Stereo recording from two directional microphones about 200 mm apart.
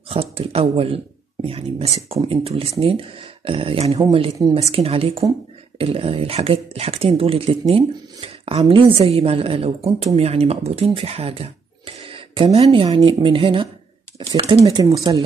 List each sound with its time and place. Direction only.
0.1 s speech: 30° right (ahead or behind)